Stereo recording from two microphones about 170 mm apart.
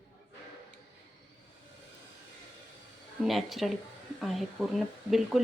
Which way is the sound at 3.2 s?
Centre (ahead or behind).